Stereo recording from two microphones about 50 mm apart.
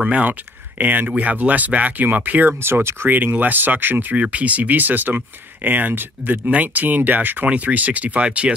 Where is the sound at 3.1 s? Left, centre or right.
Right.